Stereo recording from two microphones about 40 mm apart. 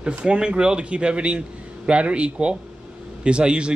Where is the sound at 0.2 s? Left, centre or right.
Right.